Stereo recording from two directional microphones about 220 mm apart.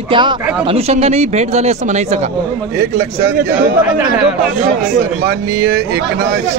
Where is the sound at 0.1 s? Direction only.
20° right (ahead or behind).